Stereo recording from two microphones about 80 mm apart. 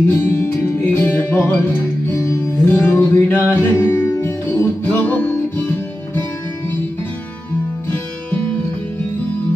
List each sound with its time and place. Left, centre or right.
0.1 s music: left
3.7 s music: left
4.6 s music: left